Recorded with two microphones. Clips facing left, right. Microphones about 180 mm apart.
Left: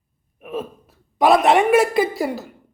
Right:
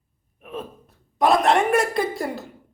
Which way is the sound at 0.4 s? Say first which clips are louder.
Left 5 dB; 5° left (ahead or behind).